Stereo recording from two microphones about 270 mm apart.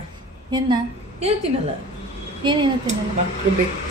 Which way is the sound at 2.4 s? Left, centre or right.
Centre.